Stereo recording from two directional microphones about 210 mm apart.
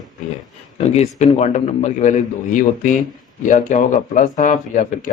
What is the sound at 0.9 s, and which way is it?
Speech, 35° left (ahead or behind).